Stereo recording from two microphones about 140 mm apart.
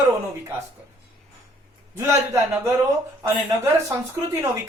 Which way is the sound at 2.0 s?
20° right (ahead or behind).